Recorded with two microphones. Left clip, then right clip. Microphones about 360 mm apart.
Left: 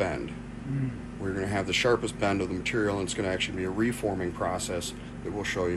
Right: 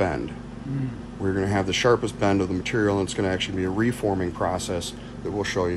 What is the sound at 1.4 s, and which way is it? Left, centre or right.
Speech, right.